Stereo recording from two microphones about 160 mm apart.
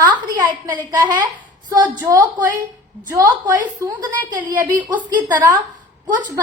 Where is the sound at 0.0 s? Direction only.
25° right (ahead or behind).